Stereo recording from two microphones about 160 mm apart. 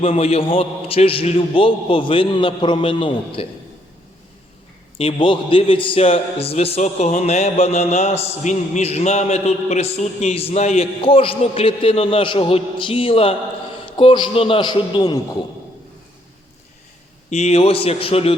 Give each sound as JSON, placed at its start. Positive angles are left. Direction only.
{"t": 0.0, "sound": "a man's voice", "side_deg": 40}
{"t": 4.9, "sound": "a man's voice", "side_deg": 35}
{"t": 17.2, "sound": "a man's voice", "side_deg": 45}